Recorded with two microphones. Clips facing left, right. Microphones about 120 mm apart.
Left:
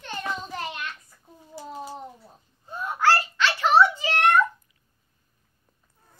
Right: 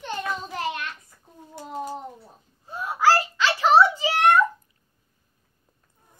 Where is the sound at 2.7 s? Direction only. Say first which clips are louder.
Right 2 dB; 5° right (ahead or behind).